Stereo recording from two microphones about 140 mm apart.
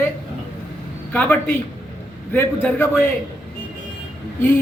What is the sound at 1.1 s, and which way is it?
A man's voice, 10° left (ahead or behind).